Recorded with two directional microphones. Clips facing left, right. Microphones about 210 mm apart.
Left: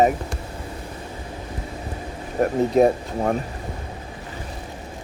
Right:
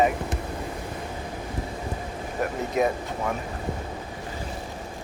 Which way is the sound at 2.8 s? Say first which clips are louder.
Left 6 dB; 40° left (ahead or behind).